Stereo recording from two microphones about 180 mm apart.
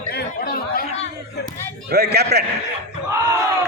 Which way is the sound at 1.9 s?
65° right (ahead or behind).